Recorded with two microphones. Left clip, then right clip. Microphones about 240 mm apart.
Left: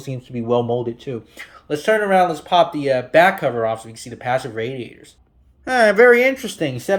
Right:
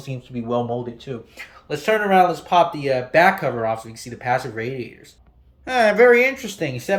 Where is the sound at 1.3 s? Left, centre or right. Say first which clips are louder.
Left 3 dB; centre.